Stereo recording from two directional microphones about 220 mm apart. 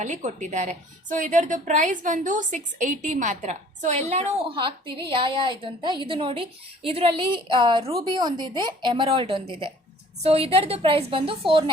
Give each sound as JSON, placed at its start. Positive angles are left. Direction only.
{"t": 0.0, "sound": "a woman's voice", "side_deg": -35}